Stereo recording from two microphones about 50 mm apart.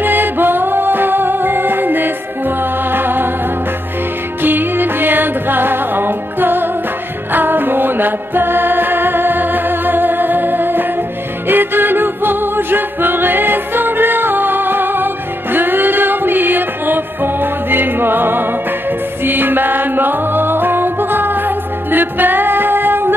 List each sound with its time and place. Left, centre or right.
0.0 s music: right
4.4 s music: right